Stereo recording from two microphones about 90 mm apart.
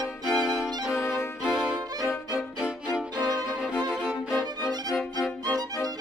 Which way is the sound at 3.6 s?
10° right (ahead or behind).